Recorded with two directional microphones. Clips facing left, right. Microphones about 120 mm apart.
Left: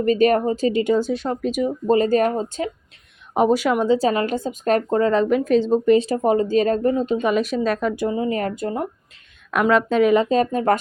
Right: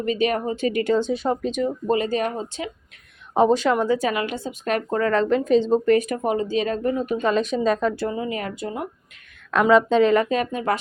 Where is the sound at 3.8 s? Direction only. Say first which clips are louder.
Left 4 dB; 30° left (ahead or behind).